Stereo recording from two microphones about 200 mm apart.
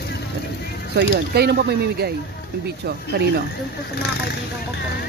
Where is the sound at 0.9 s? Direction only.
55° right (ahead or behind).